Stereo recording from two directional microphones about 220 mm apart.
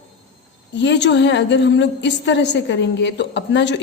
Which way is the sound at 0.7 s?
50° left (ahead or behind).